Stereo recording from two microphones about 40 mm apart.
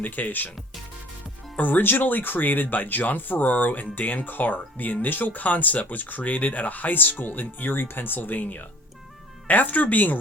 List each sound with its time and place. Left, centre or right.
0.0 s speech: left
1.5 s speech: left